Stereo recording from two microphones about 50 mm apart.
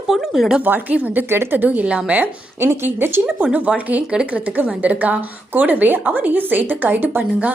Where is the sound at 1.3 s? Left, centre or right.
Right.